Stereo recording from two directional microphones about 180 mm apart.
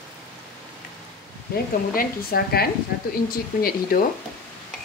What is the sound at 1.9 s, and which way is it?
Speech, 60° left (ahead or behind).